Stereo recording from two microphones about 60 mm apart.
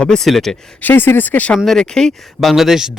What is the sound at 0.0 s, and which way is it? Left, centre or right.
Speech, centre.